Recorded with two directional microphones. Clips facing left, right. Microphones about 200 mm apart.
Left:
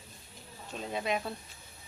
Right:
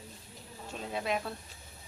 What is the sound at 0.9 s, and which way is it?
Speech, centre (ahead or behind).